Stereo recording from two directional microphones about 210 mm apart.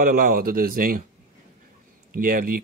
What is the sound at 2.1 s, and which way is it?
Speech, 45° right (ahead or behind).